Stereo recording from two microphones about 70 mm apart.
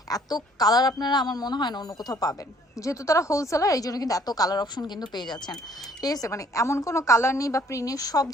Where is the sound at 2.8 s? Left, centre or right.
Left.